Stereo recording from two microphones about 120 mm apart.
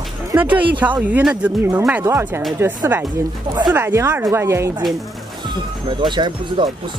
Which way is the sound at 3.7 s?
20° right (ahead or behind).